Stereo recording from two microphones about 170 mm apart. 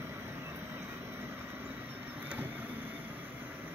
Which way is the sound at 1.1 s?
15° right (ahead or behind).